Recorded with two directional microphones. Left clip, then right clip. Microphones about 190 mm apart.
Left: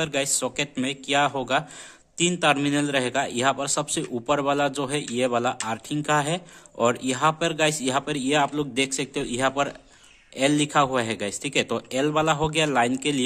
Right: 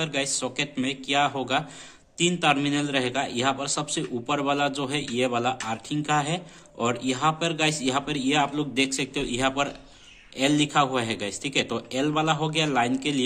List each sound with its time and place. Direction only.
0.0 s speech: 50° left (ahead or behind)